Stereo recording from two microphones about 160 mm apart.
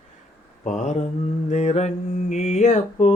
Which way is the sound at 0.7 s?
50° left (ahead or behind).